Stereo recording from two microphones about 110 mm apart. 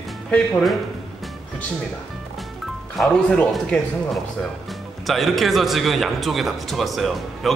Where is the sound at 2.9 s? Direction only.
5° left (ahead or behind).